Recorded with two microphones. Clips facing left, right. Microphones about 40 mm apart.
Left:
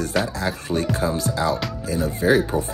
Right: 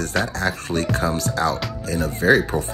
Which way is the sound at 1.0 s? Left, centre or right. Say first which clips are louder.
Right 1 dB; centre.